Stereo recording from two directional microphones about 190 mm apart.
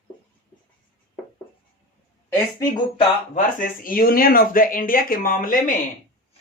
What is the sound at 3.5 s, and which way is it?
Speech, 45° left (ahead or behind).